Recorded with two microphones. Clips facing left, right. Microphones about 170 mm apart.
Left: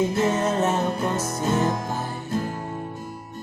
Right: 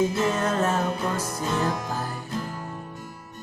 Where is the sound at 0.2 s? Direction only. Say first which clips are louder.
Left 2 dB; 25° left (ahead or behind).